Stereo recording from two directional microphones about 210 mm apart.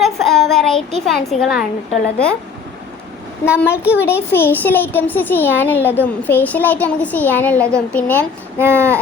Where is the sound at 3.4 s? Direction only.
5° left (ahead or behind).